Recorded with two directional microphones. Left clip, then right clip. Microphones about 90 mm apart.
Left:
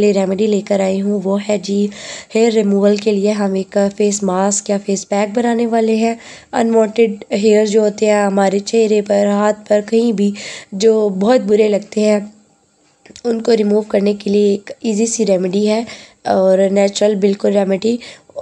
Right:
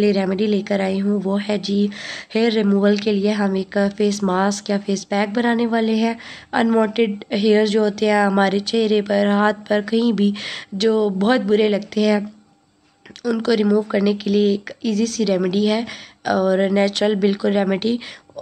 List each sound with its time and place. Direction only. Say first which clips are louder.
0.0 s speech: left 5 dB; 35° left (ahead or behind)